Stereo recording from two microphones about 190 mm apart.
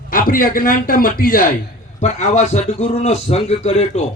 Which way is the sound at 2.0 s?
35° left (ahead or behind).